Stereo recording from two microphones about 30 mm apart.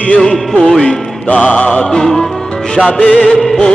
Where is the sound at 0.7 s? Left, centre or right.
Centre.